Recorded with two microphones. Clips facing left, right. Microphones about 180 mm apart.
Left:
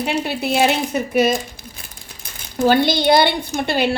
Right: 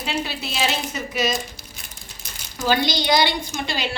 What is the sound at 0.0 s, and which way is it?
Speech, 60° left (ahead or behind).